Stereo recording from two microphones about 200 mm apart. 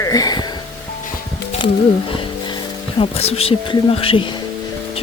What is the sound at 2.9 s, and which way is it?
Speech, 30° left (ahead or behind).